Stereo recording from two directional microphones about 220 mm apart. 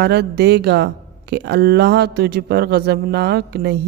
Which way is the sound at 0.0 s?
50° right (ahead or behind).